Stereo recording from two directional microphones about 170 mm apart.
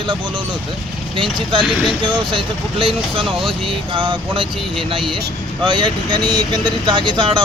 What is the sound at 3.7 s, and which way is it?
Speech, 30° right (ahead or behind).